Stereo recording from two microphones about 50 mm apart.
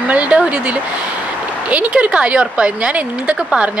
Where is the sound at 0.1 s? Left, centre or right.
Right.